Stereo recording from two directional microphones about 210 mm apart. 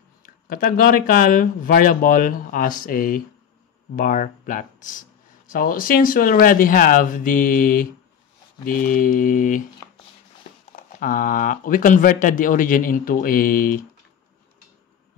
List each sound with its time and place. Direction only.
0.5 s speech: 45° left (ahead or behind)
11.0 s speech: 40° left (ahead or behind)